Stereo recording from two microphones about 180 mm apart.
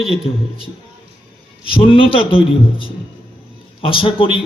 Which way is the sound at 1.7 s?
30° left (ahead or behind).